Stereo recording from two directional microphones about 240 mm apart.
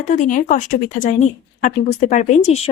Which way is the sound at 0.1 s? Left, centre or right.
Left.